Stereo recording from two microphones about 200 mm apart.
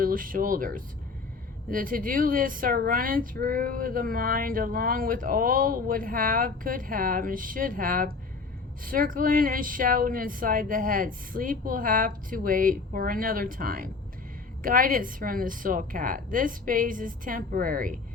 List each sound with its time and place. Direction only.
0.0 s speech: 45° right (ahead or behind)